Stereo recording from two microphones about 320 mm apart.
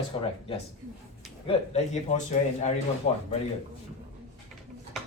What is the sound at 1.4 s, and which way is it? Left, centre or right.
Speech, centre.